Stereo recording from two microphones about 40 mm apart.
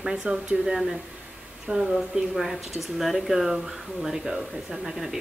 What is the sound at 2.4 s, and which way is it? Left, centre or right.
Speech, centre.